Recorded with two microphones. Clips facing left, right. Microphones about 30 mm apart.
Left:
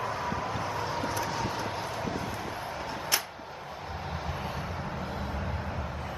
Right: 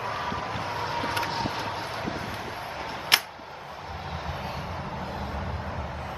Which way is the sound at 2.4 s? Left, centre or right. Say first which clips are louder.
Right 1 dB; centre.